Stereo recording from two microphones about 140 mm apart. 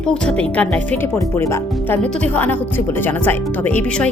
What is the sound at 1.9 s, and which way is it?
Speech, 15° left (ahead or behind).